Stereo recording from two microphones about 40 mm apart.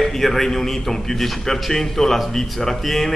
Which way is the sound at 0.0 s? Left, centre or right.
Centre.